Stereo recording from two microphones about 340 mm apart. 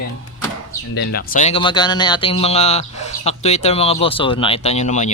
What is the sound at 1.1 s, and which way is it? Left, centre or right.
Speech, left.